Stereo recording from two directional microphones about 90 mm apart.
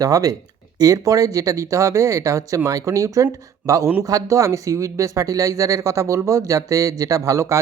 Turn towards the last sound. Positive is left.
turn(degrees=-35)  # may be behind; listen again after turning